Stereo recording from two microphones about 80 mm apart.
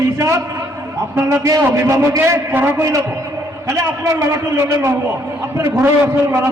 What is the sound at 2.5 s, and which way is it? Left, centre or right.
A man's voice, right.